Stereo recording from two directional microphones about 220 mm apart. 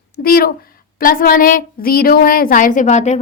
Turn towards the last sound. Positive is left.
turn(degrees=30)  # may be behind; listen again after turning